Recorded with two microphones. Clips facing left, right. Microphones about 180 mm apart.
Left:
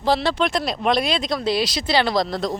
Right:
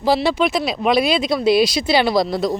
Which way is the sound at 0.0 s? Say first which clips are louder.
Right 3 dB; 10° right (ahead or behind).